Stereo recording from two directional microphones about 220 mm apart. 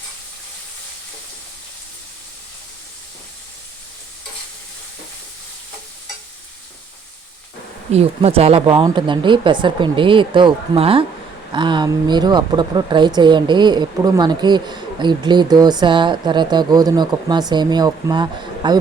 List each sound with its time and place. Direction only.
7.9 s speech: 25° right (ahead or behind)